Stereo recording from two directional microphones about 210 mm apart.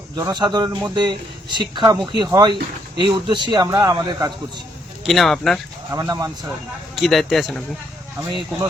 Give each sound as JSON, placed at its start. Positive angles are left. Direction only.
{"t": 0.2, "sound": "a man's voice", "side_deg": -20}
{"t": 5.0, "sound": "speech", "side_deg": 0}
{"t": 5.9, "sound": "speech", "side_deg": -15}
{"t": 6.9, "sound": "speech", "side_deg": 0}